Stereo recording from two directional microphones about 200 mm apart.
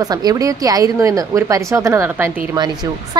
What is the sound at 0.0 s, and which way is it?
A woman's voice, 20° right (ahead or behind).